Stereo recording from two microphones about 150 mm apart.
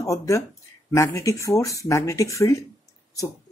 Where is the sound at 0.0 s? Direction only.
20° left (ahead or behind).